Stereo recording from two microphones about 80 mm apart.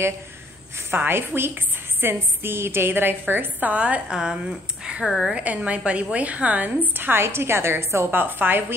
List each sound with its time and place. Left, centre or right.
0.9 s a woman's voice: right